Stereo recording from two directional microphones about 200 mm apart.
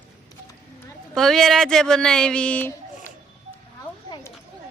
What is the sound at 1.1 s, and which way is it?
A woman's voice, centre (ahead or behind).